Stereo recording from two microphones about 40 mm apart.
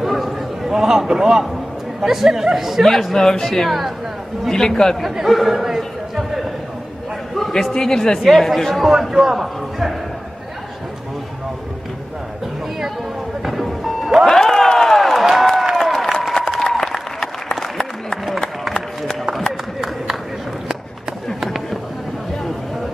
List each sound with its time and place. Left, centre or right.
0.0 s a sound: centre
0.7 s a man's voice: centre
2.8 s speech: centre
5.0 s chatter: centre
7.3 s a sound: centre
7.7 s speech: centre
8.2 s speech: centre
9.1 s a man's voice: centre
13.5 s music: centre
14.3 s a sound: centre
15.8 s applause: centre